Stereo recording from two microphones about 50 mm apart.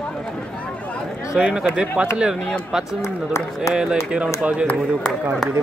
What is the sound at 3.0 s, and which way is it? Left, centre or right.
Speech, left.